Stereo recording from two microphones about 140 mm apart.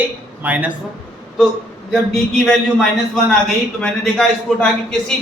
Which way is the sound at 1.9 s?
Centre (ahead or behind).